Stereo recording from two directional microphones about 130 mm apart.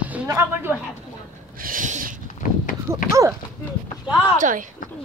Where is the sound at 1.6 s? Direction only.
90° right.